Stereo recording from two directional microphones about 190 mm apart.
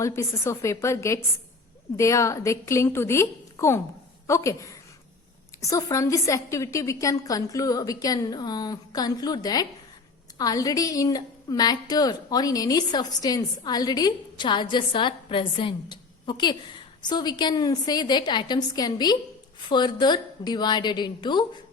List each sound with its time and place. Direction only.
0.0 s a woman's voice: 15° left (ahead or behind)